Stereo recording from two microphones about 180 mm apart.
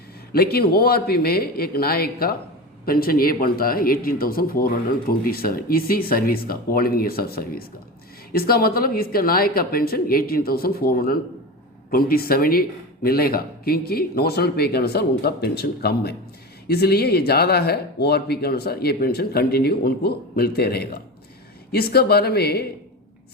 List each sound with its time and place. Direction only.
0.3 s speech: 60° left (ahead or behind)